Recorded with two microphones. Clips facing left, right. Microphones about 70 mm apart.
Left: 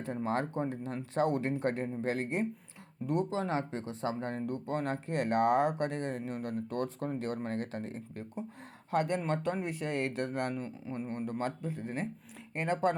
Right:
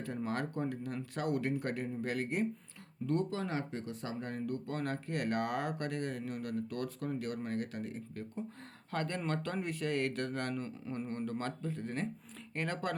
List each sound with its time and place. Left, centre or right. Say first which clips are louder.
0.0 s speech: left 4 dB; left
8.9 s speech: left 5 dB; centre